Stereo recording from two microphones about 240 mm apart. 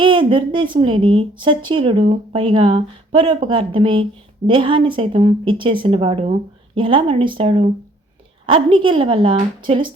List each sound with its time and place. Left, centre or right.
0.0 s a woman's voice: right